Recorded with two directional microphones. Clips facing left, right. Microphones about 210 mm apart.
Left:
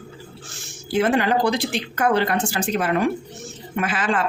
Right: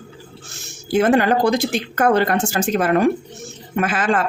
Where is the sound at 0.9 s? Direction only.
45° right (ahead or behind).